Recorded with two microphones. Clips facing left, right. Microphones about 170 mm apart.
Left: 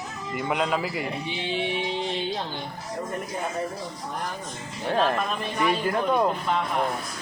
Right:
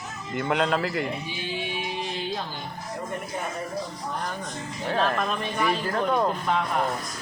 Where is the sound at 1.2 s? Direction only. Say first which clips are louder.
Left 4 dB; 25° left (ahead or behind).